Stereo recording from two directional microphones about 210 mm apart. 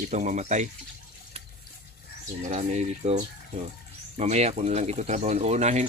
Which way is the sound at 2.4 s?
35° right (ahead or behind).